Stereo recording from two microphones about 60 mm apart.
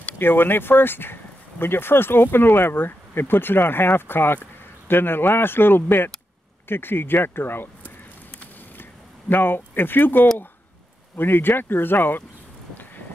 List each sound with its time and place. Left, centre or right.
0.2 s speech: left
9.3 s speech: left